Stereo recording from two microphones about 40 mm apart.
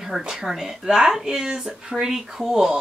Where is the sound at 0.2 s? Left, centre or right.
Centre.